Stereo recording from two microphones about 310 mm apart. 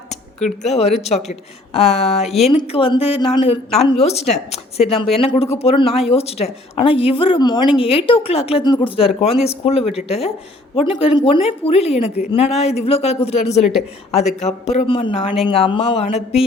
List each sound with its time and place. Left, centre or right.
0.6 s a woman's voice: left